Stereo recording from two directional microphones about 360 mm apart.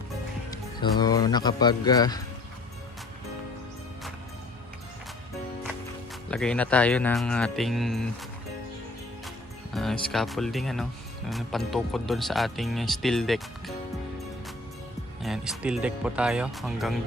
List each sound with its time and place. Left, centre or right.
0.5 s a man's voice: centre
6.3 s speech: centre
9.7 s speech: centre
15.2 s speech: centre